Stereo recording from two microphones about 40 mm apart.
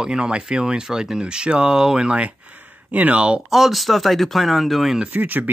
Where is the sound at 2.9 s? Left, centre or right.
Right.